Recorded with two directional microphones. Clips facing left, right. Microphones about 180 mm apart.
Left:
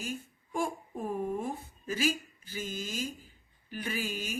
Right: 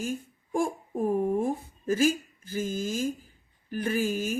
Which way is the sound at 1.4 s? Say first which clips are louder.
Right 8 dB; 50° right (ahead or behind).